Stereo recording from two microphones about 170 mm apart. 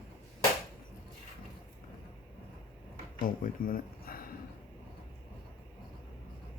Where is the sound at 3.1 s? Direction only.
55° left (ahead or behind).